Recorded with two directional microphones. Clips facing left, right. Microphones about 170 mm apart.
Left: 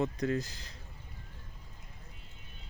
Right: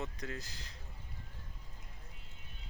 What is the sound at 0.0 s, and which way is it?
Speech, 50° left (ahead or behind).